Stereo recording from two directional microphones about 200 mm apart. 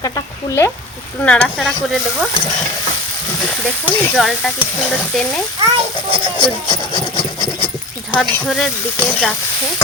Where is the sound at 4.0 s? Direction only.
Centre (ahead or behind).